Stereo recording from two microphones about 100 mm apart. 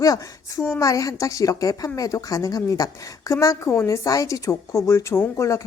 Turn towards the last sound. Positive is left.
turn(degrees=30)  # may be behind; listen again after turning